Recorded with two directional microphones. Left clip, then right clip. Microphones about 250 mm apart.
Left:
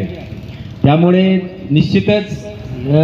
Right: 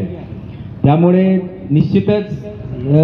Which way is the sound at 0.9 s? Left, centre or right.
Left.